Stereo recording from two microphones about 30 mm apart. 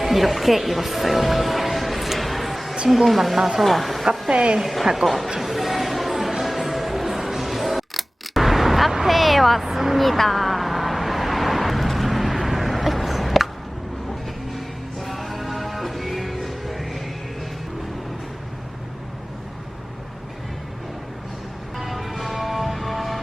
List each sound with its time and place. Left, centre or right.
0.0 s music: centre
2.9 s a woman's voice: centre
3.3 s speech: centre
3.6 s a woman's voice: centre
4.3 s a woman's voice: right
4.6 s a woman's voice: centre
5.4 s a sound: centre
6.4 s music: centre
8.9 s vehicle: centre
9.6 s speech: centre
10.0 s vehicle: centre
14.5 s music: centre
21.8 s music: centre